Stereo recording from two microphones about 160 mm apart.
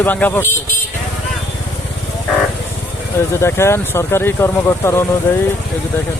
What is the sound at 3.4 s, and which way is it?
Speech, 15° left (ahead or behind).